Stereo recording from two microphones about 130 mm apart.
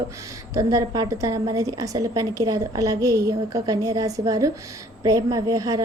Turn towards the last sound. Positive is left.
turn(degrees=-25)  # may be behind; listen again after turning